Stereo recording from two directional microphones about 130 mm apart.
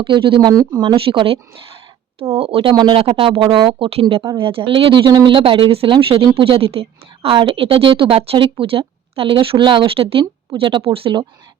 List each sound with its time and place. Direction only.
0.0 s speech: 40° right (ahead or behind)
0.9 s speech: 45° right (ahead or behind)
3.0 s speech: 45° right (ahead or behind)